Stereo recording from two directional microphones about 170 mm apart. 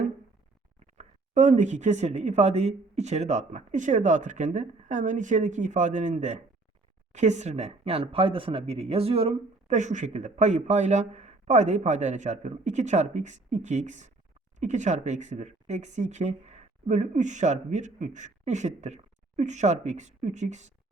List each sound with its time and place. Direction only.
0.8 s speech: 45° right (ahead or behind)